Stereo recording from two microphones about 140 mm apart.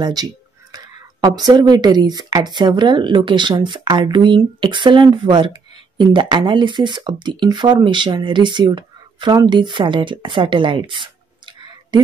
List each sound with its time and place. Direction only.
0.0 s speech: 30° right (ahead or behind)